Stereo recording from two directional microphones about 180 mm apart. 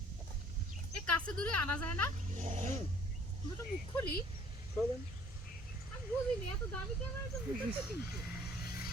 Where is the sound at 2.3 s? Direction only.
40° right (ahead or behind).